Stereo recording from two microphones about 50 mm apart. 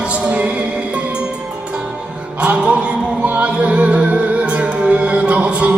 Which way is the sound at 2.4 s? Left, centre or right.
Right.